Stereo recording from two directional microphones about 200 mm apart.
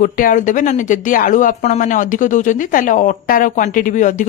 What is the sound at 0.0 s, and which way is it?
Speech, 40° left (ahead or behind).